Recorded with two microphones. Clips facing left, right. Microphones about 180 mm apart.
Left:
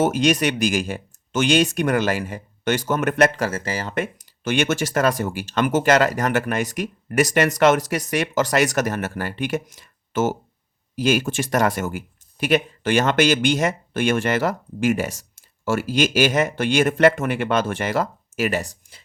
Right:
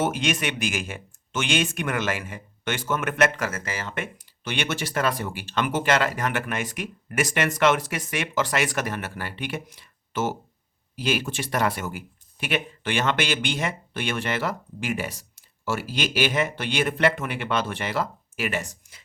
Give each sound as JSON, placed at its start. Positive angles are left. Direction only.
{"t": 0.0, "sound": "speech", "side_deg": 40}